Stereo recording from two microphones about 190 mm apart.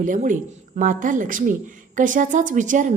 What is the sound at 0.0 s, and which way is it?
A woman's voice, 45° right (ahead or behind).